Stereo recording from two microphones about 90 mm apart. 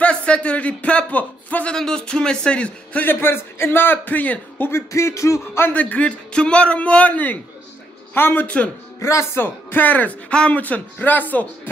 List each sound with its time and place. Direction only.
0.0 s speech: 15° left (ahead or behind); by 5.7 s 35° left (ahead or behind)
5.7 s speech: 15° left (ahead or behind)
9.0 s speech: 30° left (ahead or behind)